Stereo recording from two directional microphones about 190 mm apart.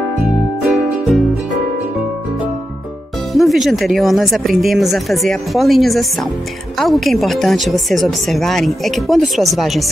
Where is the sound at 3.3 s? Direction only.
Centre (ahead or behind).